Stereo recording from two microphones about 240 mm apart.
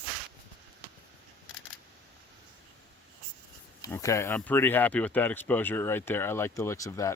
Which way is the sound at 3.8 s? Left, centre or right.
Centre.